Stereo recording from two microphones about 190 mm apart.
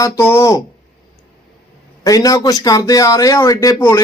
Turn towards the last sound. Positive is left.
turn(degrees=15)  # may be behind; listen again after turning